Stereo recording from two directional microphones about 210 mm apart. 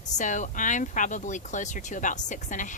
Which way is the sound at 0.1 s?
35° left (ahead or behind).